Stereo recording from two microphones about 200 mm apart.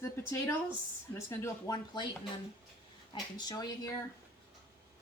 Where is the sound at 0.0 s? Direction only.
15° left (ahead or behind).